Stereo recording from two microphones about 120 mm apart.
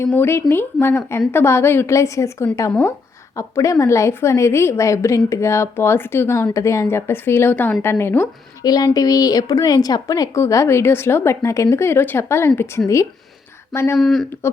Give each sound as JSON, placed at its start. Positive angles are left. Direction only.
{"t": 0.0, "sound": "a woman's voice", "side_deg": 20}
{"t": 8.6, "sound": "a woman's voice", "side_deg": 30}
{"t": 13.7, "sound": "a woman's voice", "side_deg": 20}
{"t": 14.0, "sound": "speech", "side_deg": 0}